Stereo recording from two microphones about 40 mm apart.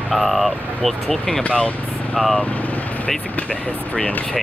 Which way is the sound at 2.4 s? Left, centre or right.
Left.